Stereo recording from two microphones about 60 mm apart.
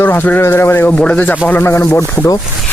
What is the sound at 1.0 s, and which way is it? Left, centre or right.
Speech, left.